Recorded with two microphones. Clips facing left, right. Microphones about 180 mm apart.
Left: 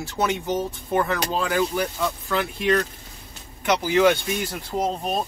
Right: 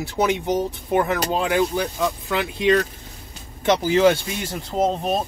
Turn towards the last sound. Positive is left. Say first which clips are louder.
# right 4 dB
turn(degrees=-25)  # may be behind; listen again after turning